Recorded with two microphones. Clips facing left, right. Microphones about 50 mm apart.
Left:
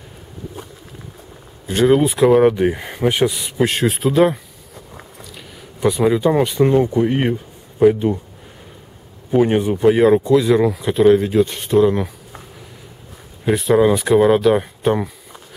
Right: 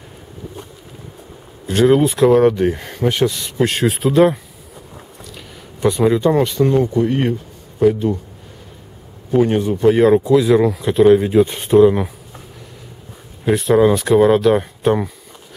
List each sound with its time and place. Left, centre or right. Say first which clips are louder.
1.7 s speech: right 1 dB; centre
9.4 s speech: even; centre
13.5 s speech: right 1 dB; centre